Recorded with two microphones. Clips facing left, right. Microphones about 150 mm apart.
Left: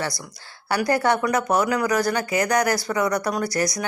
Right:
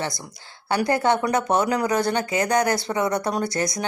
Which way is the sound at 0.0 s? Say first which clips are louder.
Even; 25° right (ahead or behind).